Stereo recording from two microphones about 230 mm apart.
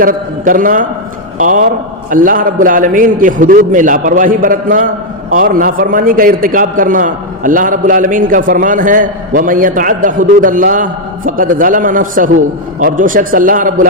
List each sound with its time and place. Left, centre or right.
0.0 s a man's voice: right